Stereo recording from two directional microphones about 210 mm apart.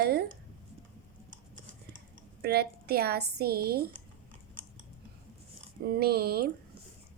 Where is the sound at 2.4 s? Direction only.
50° right (ahead or behind).